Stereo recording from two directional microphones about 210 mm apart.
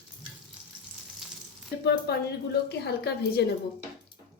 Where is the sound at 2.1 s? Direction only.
50° left (ahead or behind).